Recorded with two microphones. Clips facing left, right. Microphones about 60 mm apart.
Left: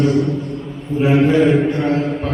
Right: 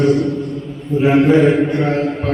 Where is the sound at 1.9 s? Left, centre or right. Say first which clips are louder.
Right 1 dB; right.